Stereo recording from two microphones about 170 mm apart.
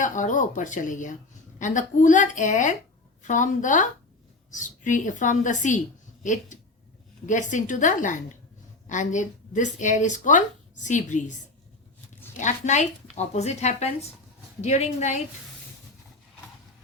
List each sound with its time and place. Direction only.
0.0 s speech: 50° left (ahead or behind)
12.4 s speech: 45° left (ahead or behind)